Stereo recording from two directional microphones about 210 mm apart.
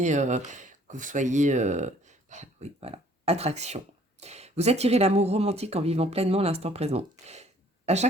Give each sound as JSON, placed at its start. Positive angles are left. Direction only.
{"t": 0.0, "sound": "speech", "side_deg": -35}